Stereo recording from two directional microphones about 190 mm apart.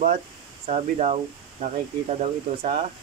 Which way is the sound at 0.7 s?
30° right (ahead or behind).